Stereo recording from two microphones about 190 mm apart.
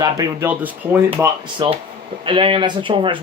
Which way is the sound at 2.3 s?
30° right (ahead or behind).